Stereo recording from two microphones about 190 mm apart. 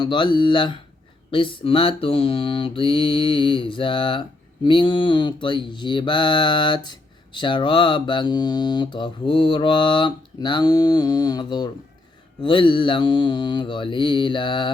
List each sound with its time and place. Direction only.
0.0 s speech: 25° left (ahead or behind)